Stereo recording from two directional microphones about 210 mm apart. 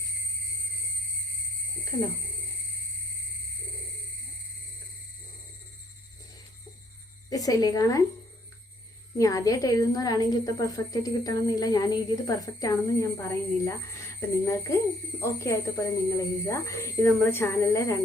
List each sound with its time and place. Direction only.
7.3 s a woman's voice: 15° left (ahead or behind)
9.1 s a woman's voice: 15° left (ahead or behind)